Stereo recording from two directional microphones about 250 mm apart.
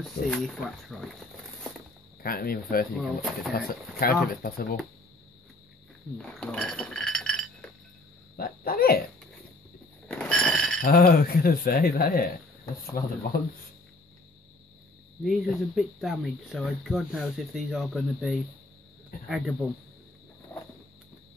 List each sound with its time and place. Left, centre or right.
0.3 s speech: centre
2.2 s speech: left
3.0 s speech: centre
4.0 s speech: left
6.1 s speech: centre
8.4 s dog: left
10.0 s a sound: centre
10.8 s speech: left
15.2 s speech: centre